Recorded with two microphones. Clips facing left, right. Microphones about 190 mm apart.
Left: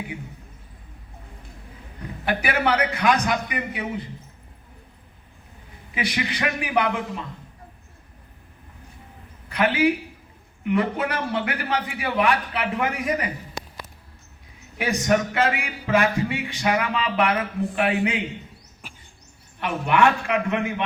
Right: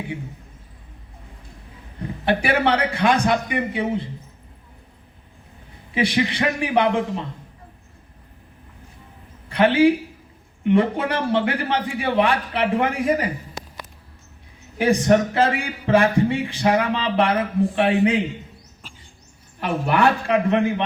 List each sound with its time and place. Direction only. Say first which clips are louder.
2.0 s a man's voice: right 5 dB; 30° right (ahead or behind)
5.9 s a man's voice: right 6 dB; 30° right (ahead or behind)
9.5 s a man's voice: right 5 dB; 30° right (ahead or behind)
14.8 s speech: right 5 dB; 30° right (ahead or behind)
19.5 s speech: even; 35° right (ahead or behind)